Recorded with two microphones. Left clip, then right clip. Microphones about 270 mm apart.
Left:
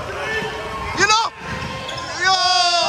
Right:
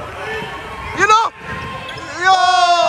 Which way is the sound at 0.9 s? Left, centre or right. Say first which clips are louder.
Right 4 dB; centre.